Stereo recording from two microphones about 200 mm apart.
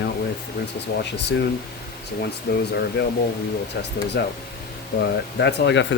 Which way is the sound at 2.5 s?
55° left (ahead or behind).